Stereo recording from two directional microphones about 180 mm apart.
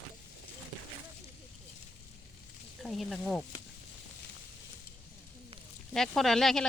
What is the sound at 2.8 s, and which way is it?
Speech, centre (ahead or behind).